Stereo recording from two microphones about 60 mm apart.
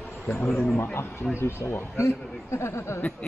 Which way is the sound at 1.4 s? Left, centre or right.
Left.